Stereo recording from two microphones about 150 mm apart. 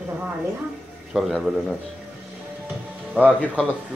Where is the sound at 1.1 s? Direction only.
Centre (ahead or behind).